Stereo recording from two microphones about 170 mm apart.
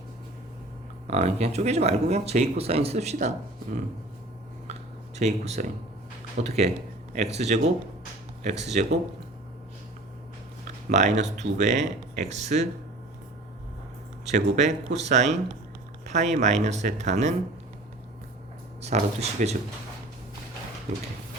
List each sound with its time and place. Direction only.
1.0 s speech: 40° right (ahead or behind)
4.7 s a sound: 40° right (ahead or behind)
6.4 s speech: 40° right (ahead or behind)
8.7 s speech: 40° right (ahead or behind)
10.8 s speech: 45° right (ahead or behind)
14.3 s speech: 45° right (ahead or behind)
18.8 s speech: 40° right (ahead or behind)
20.9 s speech: 45° right (ahead or behind)